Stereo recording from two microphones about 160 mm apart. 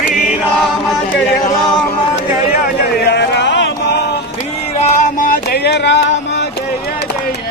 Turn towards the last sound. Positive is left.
turn(degrees=90)